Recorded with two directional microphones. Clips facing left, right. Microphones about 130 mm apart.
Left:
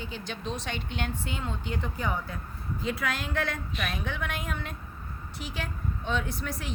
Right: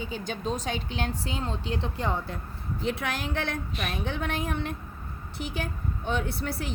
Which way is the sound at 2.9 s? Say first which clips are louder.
Even; 30° right (ahead or behind).